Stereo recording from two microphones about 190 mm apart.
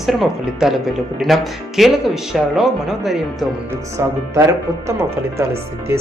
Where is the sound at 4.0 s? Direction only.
15° right (ahead or behind).